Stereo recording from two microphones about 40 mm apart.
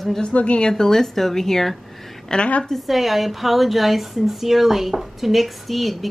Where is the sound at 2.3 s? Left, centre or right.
Left.